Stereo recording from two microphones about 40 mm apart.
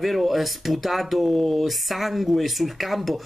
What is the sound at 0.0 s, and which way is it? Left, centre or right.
Speech, centre.